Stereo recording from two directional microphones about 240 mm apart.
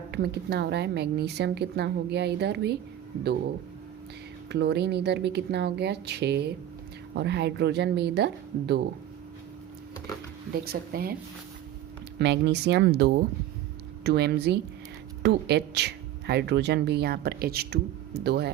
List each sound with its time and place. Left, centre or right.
0.1 s speech: right
4.4 s speech: right
10.5 s speech: right
12.2 s speech: right